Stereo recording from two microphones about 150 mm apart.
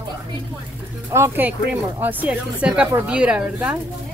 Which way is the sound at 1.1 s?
15° right (ahead or behind).